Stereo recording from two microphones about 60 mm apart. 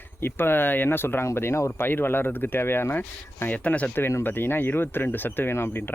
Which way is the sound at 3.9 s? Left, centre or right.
Left.